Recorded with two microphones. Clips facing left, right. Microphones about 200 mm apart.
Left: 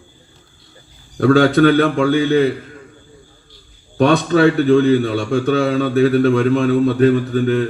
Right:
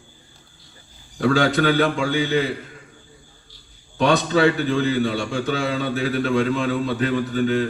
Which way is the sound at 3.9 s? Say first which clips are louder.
Left 5 dB; 55° left (ahead or behind).